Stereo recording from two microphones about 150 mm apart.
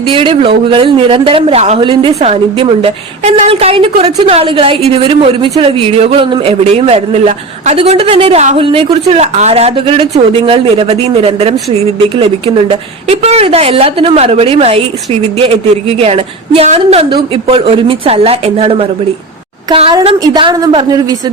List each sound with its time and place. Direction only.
0.1 s speech: 35° right (ahead or behind)
1.8 s speech: 35° right (ahead or behind)
20.1 s a woman's voice: 30° right (ahead or behind)